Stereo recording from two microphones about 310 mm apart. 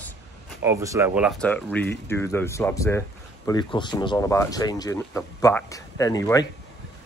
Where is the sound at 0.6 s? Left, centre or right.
Centre.